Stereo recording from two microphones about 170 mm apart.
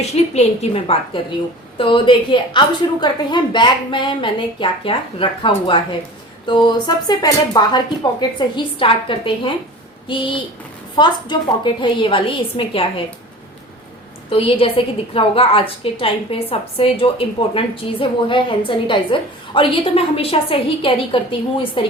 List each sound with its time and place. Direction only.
0.3 s a woman's voice: 35° left (ahead or behind)
14.3 s a woman's voice: 35° left (ahead or behind)